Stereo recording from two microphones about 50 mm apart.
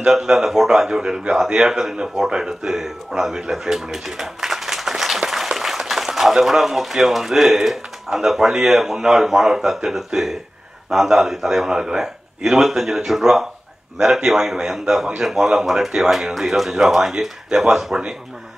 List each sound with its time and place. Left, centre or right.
0.1 s a man's voice: centre